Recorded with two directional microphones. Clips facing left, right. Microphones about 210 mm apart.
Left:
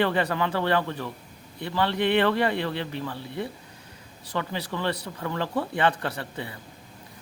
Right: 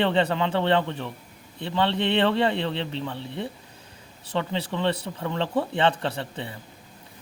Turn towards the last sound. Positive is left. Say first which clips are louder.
# right 2 dB
turn(degrees=-25)  # may be behind; listen again after turning